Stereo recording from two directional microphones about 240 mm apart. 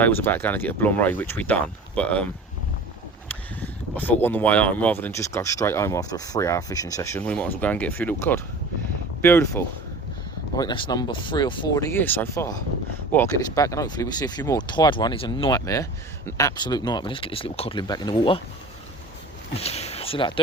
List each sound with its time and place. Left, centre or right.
0.0 s speech: centre
3.2 s speech: centre
19.6 s speech: left